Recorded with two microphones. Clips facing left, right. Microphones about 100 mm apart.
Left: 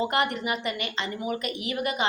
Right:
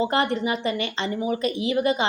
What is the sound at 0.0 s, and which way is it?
A woman's voice, 30° right (ahead or behind).